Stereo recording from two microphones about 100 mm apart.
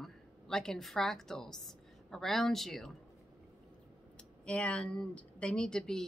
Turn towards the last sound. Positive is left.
turn(degrees=5)  # may be behind; listen again after turning